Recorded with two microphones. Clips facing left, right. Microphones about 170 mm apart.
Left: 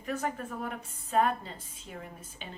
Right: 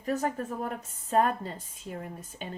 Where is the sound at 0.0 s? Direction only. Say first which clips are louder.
Right 4 dB; 40° right (ahead or behind).